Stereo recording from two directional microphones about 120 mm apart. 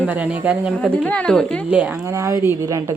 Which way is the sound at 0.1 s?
10° right (ahead or behind).